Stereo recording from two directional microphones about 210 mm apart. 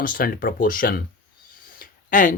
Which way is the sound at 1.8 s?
40° left (ahead or behind).